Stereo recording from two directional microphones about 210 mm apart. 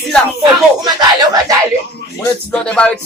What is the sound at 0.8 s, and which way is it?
Speech, 20° right (ahead or behind).